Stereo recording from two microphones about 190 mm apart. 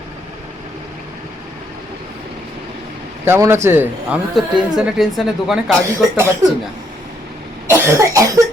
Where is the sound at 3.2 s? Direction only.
10° right (ahead or behind).